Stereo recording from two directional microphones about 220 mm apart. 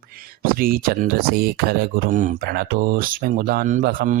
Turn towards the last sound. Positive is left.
turn(degrees=-35)  # may be behind; listen again after turning